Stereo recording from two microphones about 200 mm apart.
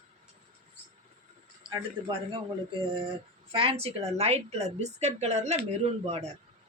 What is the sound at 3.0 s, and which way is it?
Speech, 25° right (ahead or behind).